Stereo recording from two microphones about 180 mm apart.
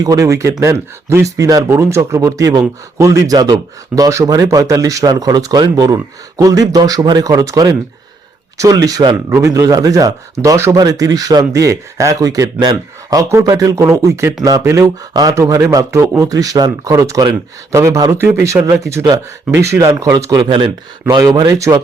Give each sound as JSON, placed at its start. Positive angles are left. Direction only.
{"t": 0.0, "sound": "speech", "side_deg": -20}